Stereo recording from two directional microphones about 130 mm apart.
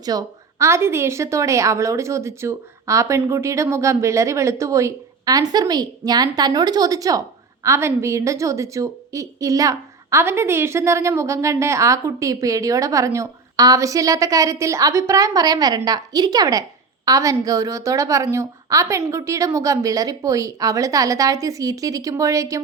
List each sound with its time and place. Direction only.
0.0 s a woman's voice: 30° right (ahead or behind)